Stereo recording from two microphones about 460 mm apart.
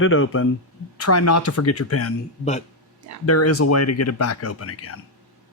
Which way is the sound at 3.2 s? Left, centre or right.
Left.